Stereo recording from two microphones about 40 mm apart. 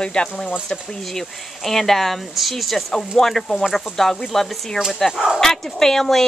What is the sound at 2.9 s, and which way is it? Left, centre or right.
Speech, centre.